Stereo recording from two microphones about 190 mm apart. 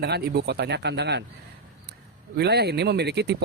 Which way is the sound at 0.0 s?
60° right (ahead or behind).